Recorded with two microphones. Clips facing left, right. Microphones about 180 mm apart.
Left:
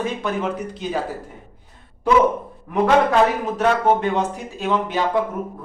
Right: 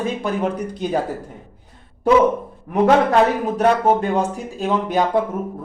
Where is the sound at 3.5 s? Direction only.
35° right (ahead or behind).